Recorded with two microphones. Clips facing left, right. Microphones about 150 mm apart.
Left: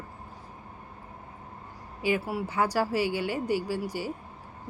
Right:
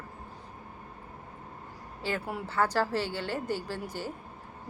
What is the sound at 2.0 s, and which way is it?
Speech, 10° left (ahead or behind).